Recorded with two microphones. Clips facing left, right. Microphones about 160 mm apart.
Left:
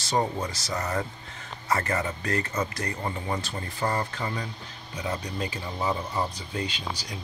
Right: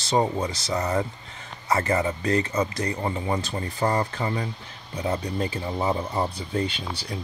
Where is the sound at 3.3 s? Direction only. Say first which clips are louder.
Right 4 dB; 35° right (ahead or behind).